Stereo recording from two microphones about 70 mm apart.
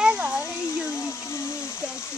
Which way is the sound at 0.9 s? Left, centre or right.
Left.